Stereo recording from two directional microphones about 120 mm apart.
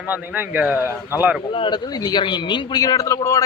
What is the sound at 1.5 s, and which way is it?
A man's voice, 40° left (ahead or behind).